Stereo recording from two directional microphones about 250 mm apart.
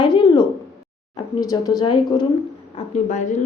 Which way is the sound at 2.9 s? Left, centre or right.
Left.